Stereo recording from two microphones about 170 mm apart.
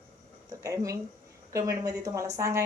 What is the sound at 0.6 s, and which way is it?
Speech, 20° right (ahead or behind).